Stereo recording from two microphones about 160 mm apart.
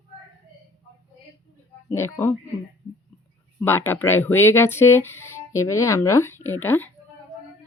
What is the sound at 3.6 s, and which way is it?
Speech, 15° left (ahead or behind).